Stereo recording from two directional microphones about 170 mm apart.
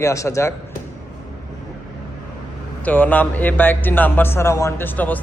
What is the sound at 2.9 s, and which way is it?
Speech, 10° left (ahead or behind).